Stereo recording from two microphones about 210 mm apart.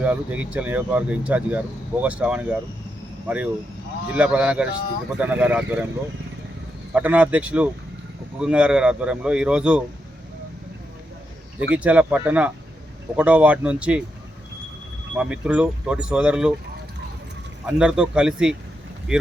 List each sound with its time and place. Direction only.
0.0 s a man's voice: 5° right (ahead or behind)
6.9 s a man's voice: 5° right (ahead or behind)
11.7 s speech: 5° right (ahead or behind)
15.1 s a man's voice: 5° right (ahead or behind)
17.7 s a man's voice: 5° right (ahead or behind)